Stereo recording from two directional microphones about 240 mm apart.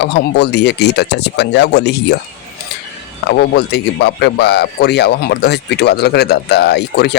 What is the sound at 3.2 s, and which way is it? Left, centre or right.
A man's voice, left.